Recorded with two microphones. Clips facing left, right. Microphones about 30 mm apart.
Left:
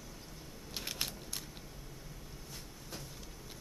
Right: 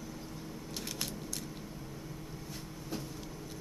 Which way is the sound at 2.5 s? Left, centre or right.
Centre.